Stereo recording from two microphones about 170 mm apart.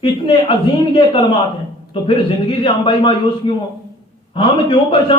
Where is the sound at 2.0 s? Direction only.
30° left (ahead or behind).